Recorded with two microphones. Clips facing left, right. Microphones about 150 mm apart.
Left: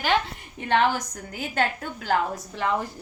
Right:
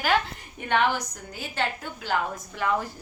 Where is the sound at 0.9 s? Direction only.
50° left (ahead or behind).